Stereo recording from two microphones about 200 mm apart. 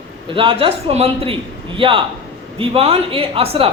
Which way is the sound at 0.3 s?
25° right (ahead or behind).